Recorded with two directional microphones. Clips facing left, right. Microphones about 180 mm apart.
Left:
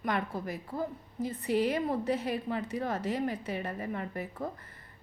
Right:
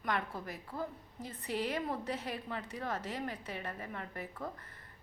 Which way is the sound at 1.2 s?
10° left (ahead or behind).